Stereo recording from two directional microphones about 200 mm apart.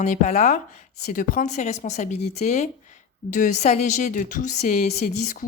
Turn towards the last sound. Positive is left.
turn(degrees=40)  # may be behind; listen again after turning